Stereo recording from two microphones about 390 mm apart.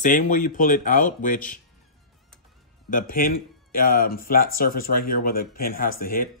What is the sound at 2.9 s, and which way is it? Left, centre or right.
Speech, left.